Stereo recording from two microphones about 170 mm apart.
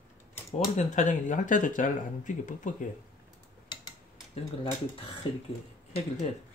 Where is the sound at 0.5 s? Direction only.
45° left (ahead or behind).